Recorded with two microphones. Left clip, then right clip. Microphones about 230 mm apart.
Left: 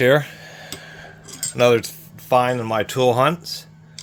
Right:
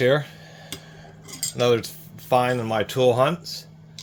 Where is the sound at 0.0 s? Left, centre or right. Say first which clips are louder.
Left 4 dB; left.